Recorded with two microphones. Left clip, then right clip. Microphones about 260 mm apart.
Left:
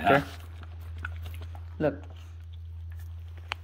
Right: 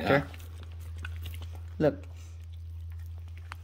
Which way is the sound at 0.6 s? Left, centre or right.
Centre.